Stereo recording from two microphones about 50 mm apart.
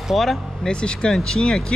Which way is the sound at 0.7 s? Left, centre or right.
Centre.